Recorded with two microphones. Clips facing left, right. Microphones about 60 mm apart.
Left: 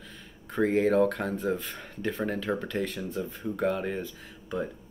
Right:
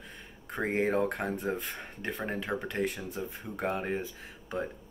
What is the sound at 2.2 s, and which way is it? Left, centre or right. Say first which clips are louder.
Speech: left 2 dB; right.